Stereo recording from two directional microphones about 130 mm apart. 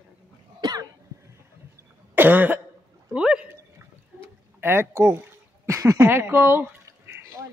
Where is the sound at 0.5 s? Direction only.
30° right (ahead or behind).